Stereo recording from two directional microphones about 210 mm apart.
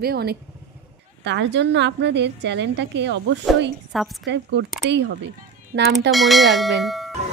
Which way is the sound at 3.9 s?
Centre (ahead or behind).